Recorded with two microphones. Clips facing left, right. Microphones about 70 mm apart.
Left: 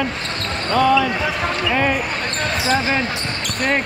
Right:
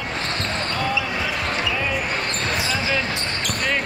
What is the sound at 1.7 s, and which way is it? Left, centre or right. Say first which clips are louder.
Basketball bounce: left 6 dB; left.